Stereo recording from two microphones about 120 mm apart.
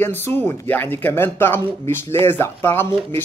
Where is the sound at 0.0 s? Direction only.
15° left (ahead or behind).